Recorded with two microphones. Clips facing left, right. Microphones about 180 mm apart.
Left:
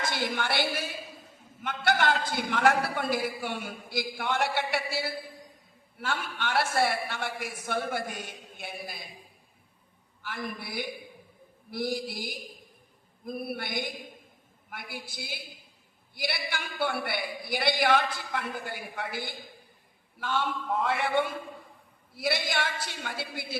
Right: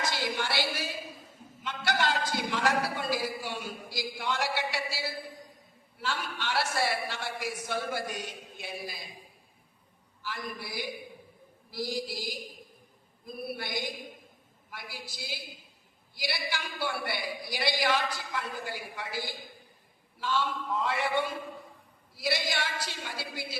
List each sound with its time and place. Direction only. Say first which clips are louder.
0.0 s a man's voice: left 1 dB; 55° left (ahead or behind)
10.2 s a man's voice: left 2 dB; 55° left (ahead or behind)